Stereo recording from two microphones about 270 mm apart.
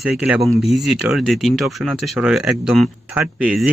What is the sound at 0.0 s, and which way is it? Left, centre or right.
Speech, centre.